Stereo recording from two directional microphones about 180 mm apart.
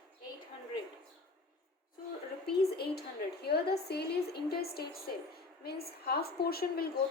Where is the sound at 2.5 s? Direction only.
60° left (ahead or behind).